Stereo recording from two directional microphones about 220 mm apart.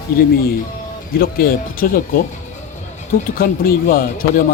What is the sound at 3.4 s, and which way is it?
Speech, 40° left (ahead or behind).